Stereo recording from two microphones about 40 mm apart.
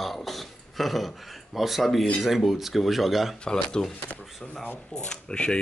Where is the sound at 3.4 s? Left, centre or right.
Centre.